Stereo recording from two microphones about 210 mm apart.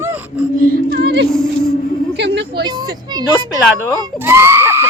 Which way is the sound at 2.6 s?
20° right (ahead or behind).